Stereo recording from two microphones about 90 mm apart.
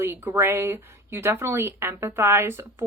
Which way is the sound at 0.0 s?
25° right (ahead or behind).